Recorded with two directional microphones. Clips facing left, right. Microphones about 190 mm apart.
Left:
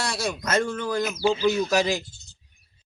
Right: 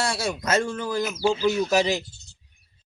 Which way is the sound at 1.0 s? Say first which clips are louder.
Even; 5° right (ahead or behind).